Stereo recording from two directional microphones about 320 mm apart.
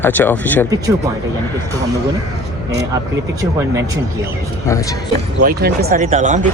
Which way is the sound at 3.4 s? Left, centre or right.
Centre.